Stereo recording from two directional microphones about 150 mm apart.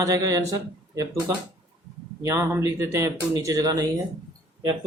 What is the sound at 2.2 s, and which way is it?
Speech, 20° right (ahead or behind).